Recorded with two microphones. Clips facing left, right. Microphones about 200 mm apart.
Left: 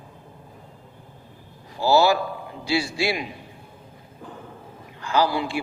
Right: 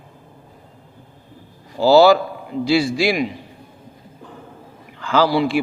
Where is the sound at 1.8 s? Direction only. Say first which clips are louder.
Right 7 dB; 90° right.